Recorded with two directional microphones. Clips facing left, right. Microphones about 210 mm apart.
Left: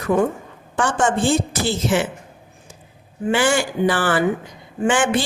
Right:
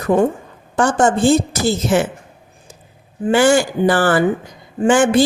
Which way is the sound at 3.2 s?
40° right (ahead or behind).